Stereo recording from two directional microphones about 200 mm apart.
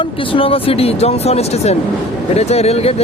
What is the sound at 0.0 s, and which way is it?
Speech, 25° left (ahead or behind).